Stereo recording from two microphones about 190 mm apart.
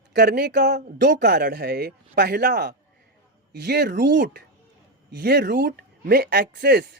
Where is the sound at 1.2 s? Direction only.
60° right (ahead or behind).